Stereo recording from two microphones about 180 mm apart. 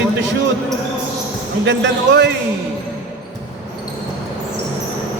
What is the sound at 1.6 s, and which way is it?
Speech, 80° right.